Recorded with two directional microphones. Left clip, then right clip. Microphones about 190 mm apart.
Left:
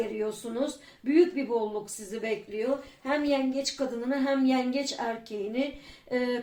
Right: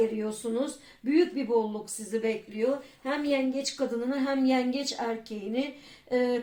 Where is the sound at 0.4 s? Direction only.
30° right (ahead or behind).